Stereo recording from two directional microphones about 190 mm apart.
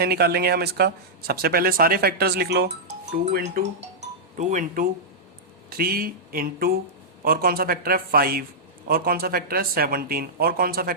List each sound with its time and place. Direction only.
0.0 s speech: 55° right (ahead or behind)
3.6 s speech: 35° right (ahead or behind); by 10.9 s 50° right (ahead or behind)